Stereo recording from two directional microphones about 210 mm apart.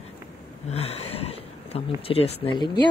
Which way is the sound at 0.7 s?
30° left (ahead or behind).